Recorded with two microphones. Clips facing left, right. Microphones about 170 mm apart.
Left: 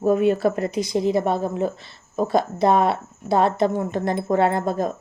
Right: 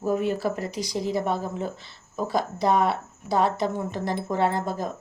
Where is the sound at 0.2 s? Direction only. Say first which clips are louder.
Left 7 dB; 65° left (ahead or behind).